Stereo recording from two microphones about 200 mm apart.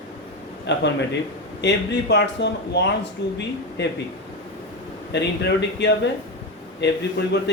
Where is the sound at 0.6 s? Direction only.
60° left (ahead or behind).